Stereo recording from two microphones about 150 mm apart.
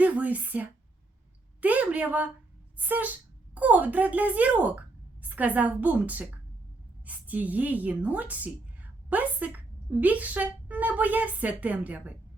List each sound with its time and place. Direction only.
0.0 s a woman's voice: 10° right (ahead or behind)